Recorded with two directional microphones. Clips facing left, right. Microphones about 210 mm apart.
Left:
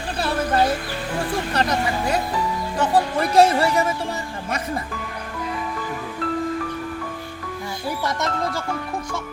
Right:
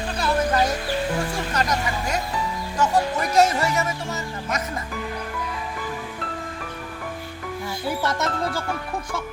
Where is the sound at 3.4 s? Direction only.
30° left (ahead or behind).